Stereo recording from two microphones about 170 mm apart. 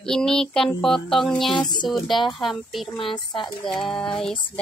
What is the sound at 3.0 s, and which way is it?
Speech, 30° left (ahead or behind).